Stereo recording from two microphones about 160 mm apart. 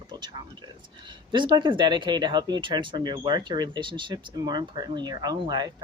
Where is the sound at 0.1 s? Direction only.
30° right (ahead or behind).